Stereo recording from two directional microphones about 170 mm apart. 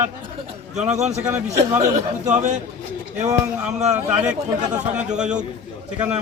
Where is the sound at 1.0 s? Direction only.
40° right (ahead or behind).